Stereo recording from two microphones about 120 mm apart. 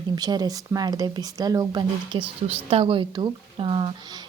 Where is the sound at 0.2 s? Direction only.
35° right (ahead or behind).